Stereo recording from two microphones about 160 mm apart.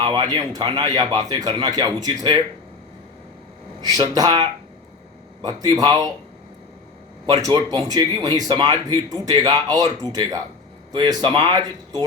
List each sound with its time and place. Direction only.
0.0 s speech: 30° right (ahead or behind)
3.8 s speech: 25° right (ahead or behind)
5.6 s speech: 25° right (ahead or behind)
7.3 s speech: 25° right (ahead or behind)